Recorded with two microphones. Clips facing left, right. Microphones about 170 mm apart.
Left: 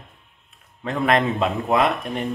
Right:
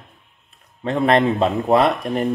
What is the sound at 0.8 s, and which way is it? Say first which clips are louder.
Speech: right 4 dB; 30° right (ahead or behind).